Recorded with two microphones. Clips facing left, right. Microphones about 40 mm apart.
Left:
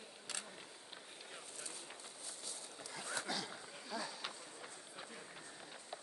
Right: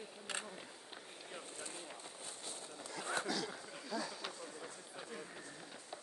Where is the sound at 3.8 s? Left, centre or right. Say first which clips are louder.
Right 2 dB; centre.